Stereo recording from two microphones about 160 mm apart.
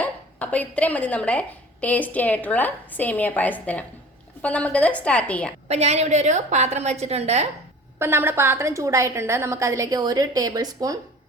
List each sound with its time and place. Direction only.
0.0 s a woman's voice: 10° left (ahead or behind)
5.6 s a woman's voice: 45° right (ahead or behind)
7.9 s a woman's voice: 15° right (ahead or behind)